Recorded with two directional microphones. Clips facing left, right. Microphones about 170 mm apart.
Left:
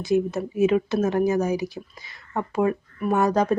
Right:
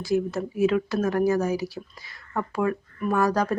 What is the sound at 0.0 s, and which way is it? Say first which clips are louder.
Speech: left 2 dB; 20° left (ahead or behind).